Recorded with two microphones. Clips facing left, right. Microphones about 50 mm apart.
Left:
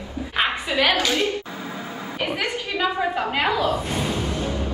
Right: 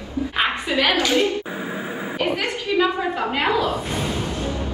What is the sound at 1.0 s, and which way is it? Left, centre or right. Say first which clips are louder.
Speech: right 3 dB; right.